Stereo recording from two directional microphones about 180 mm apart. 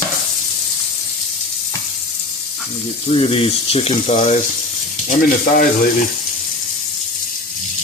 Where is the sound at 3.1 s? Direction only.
30° left (ahead or behind).